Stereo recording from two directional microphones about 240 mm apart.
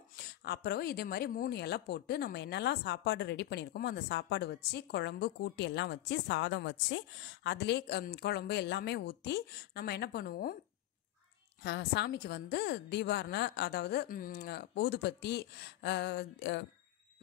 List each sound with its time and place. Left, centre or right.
0.1 s speech: left
11.6 s speech: left